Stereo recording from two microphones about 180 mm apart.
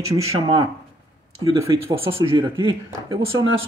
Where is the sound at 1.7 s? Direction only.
25° right (ahead or behind).